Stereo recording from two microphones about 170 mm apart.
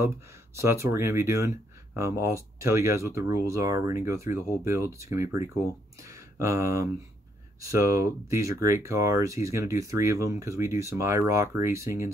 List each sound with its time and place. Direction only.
0.6 s speech: 15° right (ahead or behind)